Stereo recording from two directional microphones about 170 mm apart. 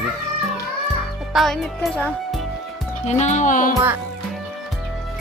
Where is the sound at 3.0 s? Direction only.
40° left (ahead or behind).